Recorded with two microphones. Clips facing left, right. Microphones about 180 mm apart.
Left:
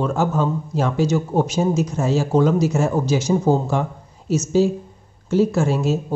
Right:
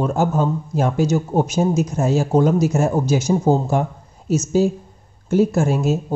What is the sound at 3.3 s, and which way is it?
Speech, 10° right (ahead or behind).